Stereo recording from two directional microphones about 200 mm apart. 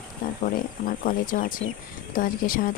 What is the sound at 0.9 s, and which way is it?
A woman's voice, 40° left (ahead or behind).